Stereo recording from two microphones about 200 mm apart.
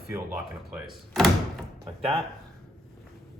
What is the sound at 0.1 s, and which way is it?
Speech, 10° right (ahead or behind).